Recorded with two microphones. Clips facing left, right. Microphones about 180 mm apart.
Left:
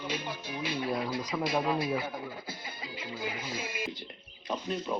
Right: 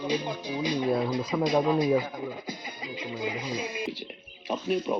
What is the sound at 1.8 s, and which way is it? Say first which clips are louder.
Music: right 8 dB; 15° right (ahead or behind).